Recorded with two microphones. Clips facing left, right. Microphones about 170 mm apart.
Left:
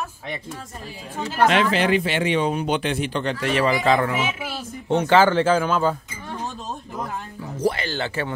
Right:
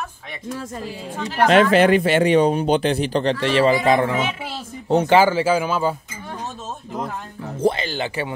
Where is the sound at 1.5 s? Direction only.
50° right (ahead or behind); by 6.0 s 10° right (ahead or behind).